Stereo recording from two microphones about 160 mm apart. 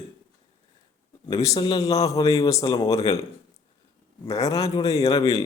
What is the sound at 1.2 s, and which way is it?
A man's voice, 20° left (ahead or behind).